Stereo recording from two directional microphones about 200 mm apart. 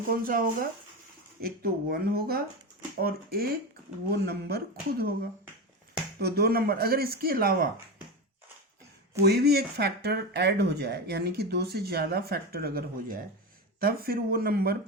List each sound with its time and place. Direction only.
0.1 s speech: 45° right (ahead or behind)
6.1 s speech: 50° right (ahead or behind)
9.2 s speech: 55° right (ahead or behind)